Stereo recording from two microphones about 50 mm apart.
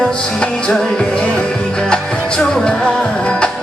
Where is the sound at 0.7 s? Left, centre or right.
Centre.